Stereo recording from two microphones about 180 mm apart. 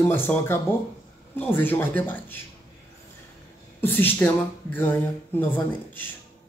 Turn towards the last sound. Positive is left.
turn(degrees=10)  # may be behind; listen again after turning